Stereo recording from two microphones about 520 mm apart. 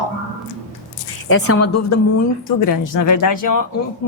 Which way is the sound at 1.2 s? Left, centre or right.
Left.